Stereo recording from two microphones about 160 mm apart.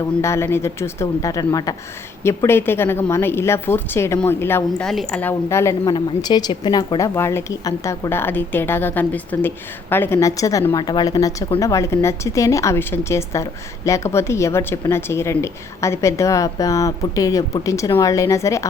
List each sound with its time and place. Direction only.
0.2 s a woman's voice: 15° left (ahead or behind)